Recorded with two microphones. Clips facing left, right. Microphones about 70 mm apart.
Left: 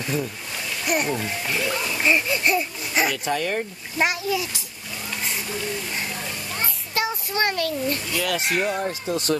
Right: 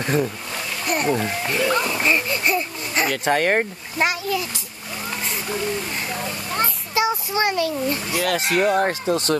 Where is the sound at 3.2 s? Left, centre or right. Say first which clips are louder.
Right 6 dB; right.